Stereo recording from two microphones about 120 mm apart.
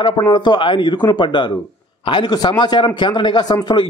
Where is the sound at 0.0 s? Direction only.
40° left (ahead or behind).